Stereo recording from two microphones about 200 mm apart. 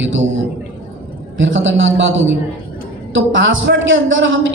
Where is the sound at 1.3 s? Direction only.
70° right (ahead or behind).